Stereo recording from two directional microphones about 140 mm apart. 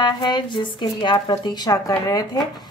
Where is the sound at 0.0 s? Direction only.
30° left (ahead or behind).